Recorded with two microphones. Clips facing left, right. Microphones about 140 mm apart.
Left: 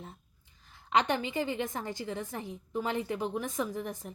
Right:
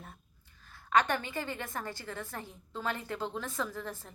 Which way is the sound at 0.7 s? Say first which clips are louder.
Even; 20° left (ahead or behind).